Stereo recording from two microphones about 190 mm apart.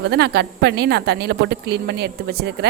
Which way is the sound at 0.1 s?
60° right (ahead or behind).